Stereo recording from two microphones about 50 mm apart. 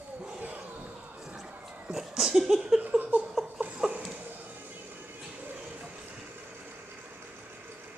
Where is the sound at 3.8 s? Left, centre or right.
Centre.